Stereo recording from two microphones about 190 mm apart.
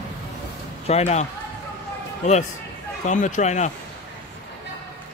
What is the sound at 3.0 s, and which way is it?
Speech, 40° left (ahead or behind).